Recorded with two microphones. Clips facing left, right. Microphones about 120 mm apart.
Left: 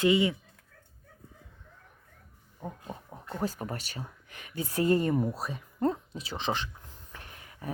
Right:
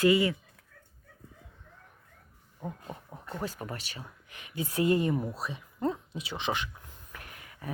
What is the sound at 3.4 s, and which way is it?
A woman's voice, 35° left (ahead or behind).